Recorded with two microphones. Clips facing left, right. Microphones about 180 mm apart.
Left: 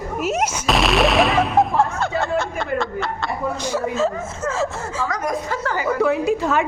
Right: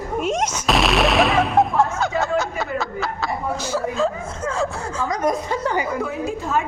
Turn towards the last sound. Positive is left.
turn(degrees=75)  # may be behind; listen again after turning